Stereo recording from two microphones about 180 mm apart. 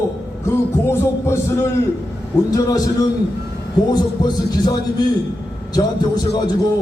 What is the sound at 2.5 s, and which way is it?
Speech, 20° left (ahead or behind).